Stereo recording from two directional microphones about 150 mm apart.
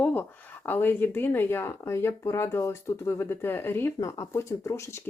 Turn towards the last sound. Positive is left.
turn(degrees=20)  # may be behind; listen again after turning